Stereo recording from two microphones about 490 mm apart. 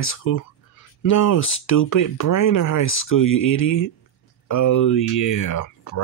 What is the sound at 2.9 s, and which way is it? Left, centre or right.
Speech, left.